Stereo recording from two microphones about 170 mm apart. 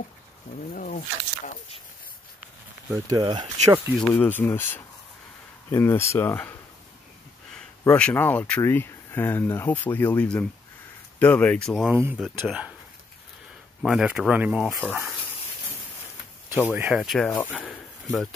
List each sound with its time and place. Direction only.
0.7 s speech: 50° left (ahead or behind)
2.9 s speech: 20° right (ahead or behind)
4.0 s speech: 10° left (ahead or behind)
7.8 s speech: 10° left (ahead or behind)
11.9 s speech: 10° right (ahead or behind)
13.8 s speech: 5° right (ahead or behind)
16.7 s speech: 10° right (ahead or behind)